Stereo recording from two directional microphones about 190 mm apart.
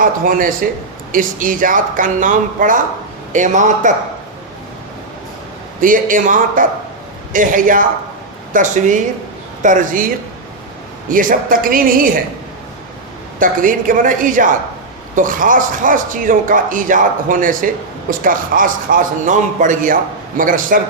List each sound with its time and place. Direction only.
0.0 s a man's voice: 45° right (ahead or behind)
5.8 s a man's voice: 45° right (ahead or behind)
11.1 s a man's voice: 45° right (ahead or behind)
13.4 s a man's voice: 45° right (ahead or behind)